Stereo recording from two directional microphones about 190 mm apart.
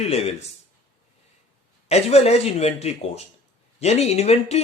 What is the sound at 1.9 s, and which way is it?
Speech, 35° left (ahead or behind).